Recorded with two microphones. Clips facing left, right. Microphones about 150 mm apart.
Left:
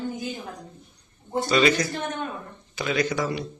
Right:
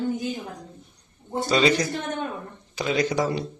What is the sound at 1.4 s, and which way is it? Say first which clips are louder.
Speech: right 1 dB; 30° right (ahead or behind).